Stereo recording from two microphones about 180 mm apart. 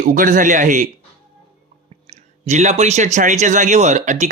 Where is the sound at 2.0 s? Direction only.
40° right (ahead or behind).